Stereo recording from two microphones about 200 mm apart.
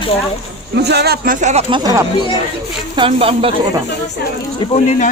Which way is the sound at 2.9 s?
25° right (ahead or behind).